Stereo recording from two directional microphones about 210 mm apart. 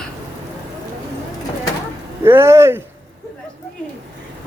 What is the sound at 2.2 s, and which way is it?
Speech, 10° right (ahead or behind).